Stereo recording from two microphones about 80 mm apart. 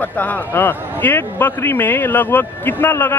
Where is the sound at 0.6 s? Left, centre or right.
Left.